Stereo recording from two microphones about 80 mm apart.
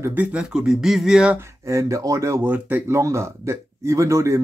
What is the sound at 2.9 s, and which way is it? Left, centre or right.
Speech, right.